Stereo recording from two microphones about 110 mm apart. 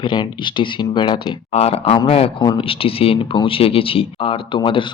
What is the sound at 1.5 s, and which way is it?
Speech, 65° left (ahead or behind).